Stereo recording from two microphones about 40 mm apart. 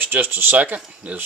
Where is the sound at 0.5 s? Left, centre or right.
Right.